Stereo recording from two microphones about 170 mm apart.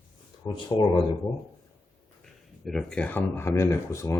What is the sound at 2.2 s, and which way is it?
Speech, centre (ahead or behind).